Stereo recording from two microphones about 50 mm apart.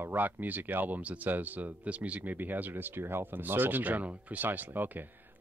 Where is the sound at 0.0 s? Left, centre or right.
Right.